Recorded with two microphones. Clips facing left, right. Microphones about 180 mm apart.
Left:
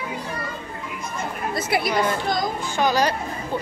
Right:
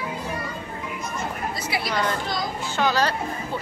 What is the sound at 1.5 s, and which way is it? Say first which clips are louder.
Speech: left 5 dB; 50° left (ahead or behind).